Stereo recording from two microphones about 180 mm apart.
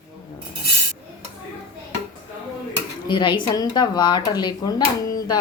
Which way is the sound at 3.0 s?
25° left (ahead or behind).